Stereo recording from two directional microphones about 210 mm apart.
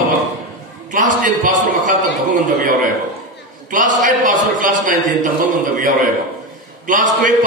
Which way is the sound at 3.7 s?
40° right (ahead or behind).